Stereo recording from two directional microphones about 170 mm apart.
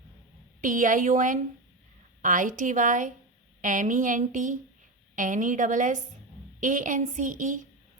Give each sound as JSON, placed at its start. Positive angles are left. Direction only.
{"t": 0.6, "sound": "a woman's voice", "side_deg": -50}